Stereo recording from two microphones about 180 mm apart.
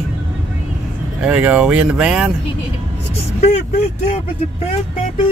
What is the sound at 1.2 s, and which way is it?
Speech, 5° right (ahead or behind).